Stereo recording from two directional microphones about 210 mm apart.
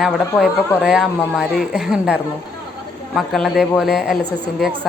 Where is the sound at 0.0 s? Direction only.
Centre (ahead or behind).